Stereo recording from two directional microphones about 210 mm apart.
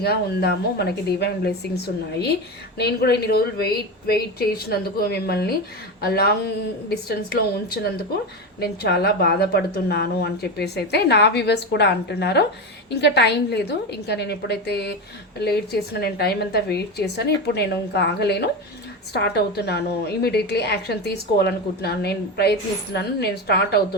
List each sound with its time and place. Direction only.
0.0 s a woman's voice: 50° left (ahead or behind)